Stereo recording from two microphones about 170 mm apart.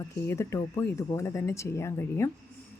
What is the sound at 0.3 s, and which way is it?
Speech, 15° left (ahead or behind).